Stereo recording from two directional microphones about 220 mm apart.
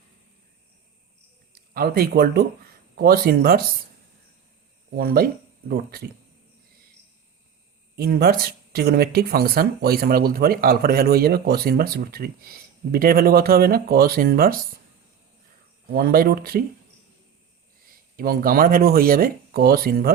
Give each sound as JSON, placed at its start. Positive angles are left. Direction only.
{"t": 1.7, "sound": "speech", "side_deg": -45}
{"t": 4.9, "sound": "speech", "side_deg": -45}
{"t": 7.9, "sound": "speech", "side_deg": -45}
{"t": 15.9, "sound": "speech", "side_deg": -40}
{"t": 17.8, "sound": "speech", "side_deg": -40}